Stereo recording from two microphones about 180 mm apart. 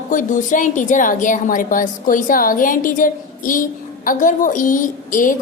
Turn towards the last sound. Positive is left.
turn(degrees=50)  # may be behind; listen again after turning